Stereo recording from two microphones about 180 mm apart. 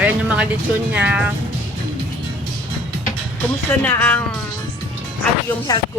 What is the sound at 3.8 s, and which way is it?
Speech, 10° left (ahead or behind).